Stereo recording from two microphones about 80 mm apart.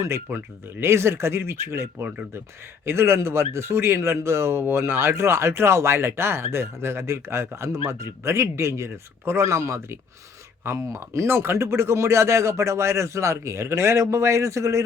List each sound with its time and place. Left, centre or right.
0.3 s speech: right